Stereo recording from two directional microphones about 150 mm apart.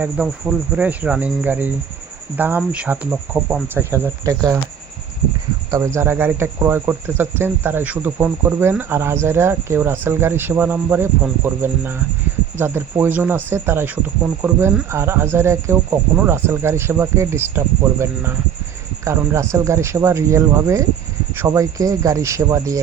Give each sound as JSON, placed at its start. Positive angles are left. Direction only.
{"t": 0.0, "sound": "speech", "side_deg": -10}
{"t": 5.7, "sound": "a man's voice", "side_deg": -20}